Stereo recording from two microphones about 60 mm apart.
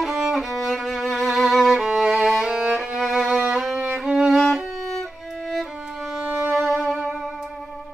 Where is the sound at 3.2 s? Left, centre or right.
Right.